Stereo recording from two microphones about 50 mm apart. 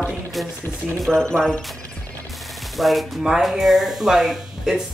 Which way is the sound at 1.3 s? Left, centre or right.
Centre.